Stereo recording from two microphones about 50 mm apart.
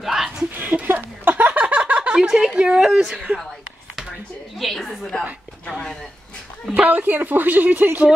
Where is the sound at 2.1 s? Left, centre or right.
Centre.